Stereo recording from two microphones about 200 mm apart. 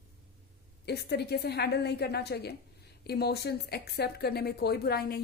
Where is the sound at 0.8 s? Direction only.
55° left (ahead or behind).